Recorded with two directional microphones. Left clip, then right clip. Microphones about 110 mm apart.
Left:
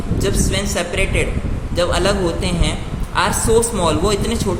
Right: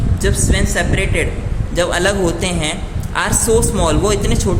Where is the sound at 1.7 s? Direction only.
25° right (ahead or behind).